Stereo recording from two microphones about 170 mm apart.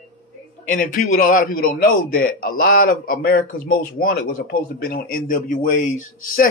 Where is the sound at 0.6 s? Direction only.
55° left (ahead or behind).